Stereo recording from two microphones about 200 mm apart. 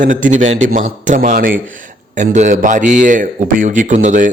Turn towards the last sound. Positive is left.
turn(degrees=-40)  # may be behind; listen again after turning